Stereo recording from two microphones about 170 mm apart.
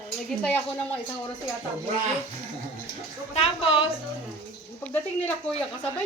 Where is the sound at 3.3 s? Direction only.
35° left (ahead or behind).